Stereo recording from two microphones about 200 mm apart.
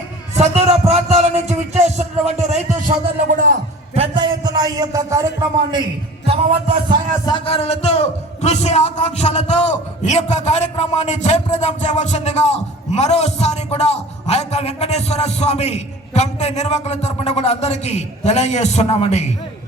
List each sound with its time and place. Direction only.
0.3 s a man's voice: 30° right (ahead or behind)
3.9 s a man's voice: 25° right (ahead or behind)
6.2 s music: 30° right (ahead or behind)
7.3 s a man's voice: 25° left (ahead or behind)